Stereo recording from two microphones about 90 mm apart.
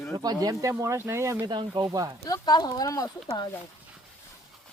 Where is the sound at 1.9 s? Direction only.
40° right (ahead or behind).